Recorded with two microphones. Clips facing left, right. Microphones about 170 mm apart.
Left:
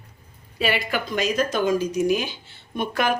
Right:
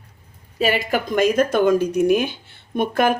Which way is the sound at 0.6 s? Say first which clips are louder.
Right 4 dB; 45° right (ahead or behind).